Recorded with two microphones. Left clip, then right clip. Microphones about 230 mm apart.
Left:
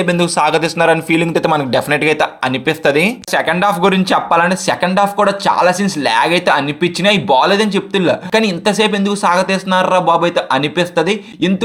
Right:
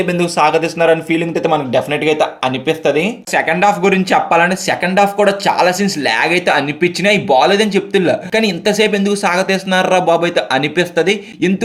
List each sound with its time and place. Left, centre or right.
0.0 s a man's voice: left